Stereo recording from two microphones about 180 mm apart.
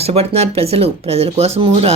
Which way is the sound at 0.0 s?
35° right (ahead or behind).